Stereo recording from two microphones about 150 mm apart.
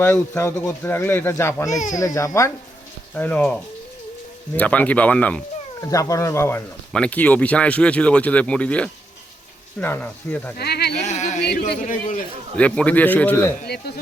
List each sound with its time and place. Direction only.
0.0 s speech: 15° left (ahead or behind)
5.8 s speech: 20° left (ahead or behind)
10.6 s speech: 90° left
11.0 s a sound: 50° left (ahead or behind)
11.4 s a man's voice: 75° left (ahead or behind); by 12.2 s 60° left (ahead or behind)
12.5 s speech: 10° left (ahead or behind)
13.6 s speech: 90° left